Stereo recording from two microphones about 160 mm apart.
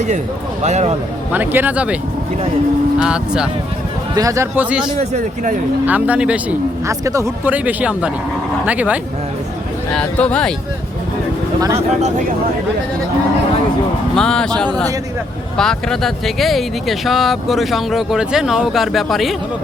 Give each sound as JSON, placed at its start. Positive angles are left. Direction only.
{"t": 0.6, "sound": "speech", "side_deg": -45}
{"t": 1.3, "sound": "speech", "side_deg": -10}
{"t": 3.0, "sound": "speech", "side_deg": -5}
{"t": 4.1, "sound": "speech", "side_deg": -20}
{"t": 4.9, "sound": "speech", "side_deg": -45}
{"t": 5.8, "sound": "speech", "side_deg": -10}
{"t": 6.8, "sound": "speech", "side_deg": -20}
{"t": 9.9, "sound": "speech", "side_deg": 5}
{"t": 14.2, "sound": "speech", "side_deg": 5}